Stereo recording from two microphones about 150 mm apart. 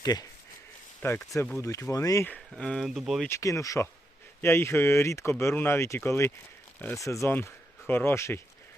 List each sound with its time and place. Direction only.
0.0 s speech: 25° left (ahead or behind)
1.0 s speech: 15° left (ahead or behind)
2.3 s speech: 5° left (ahead or behind)
3.2 s speech: 20° left (ahead or behind)